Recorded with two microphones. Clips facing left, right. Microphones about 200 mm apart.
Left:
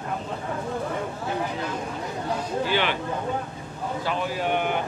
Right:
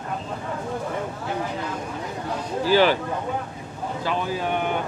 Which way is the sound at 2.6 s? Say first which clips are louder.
Right 9 dB; 40° right (ahead or behind).